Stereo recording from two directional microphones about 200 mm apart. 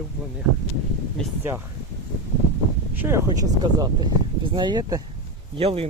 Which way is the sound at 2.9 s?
10° right (ahead or behind).